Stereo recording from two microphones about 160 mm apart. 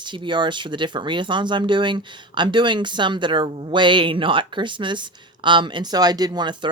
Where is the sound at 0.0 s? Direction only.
30° right (ahead or behind).